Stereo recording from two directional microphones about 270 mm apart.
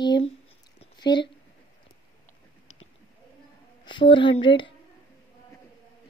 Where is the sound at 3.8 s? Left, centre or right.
Centre.